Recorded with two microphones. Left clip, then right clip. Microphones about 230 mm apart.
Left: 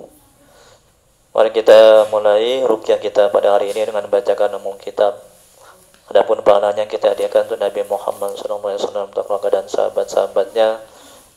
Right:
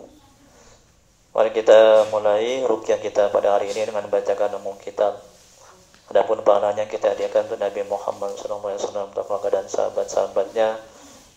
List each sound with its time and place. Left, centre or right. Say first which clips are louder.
1.3 s speech: left 5 dB; left